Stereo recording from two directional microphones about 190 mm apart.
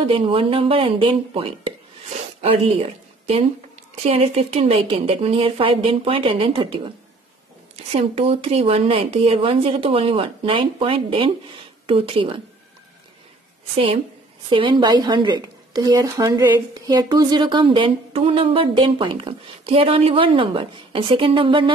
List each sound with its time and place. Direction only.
0.0 s a woman's voice: 30° right (ahead or behind)
14.5 s a woman's voice: 25° right (ahead or behind)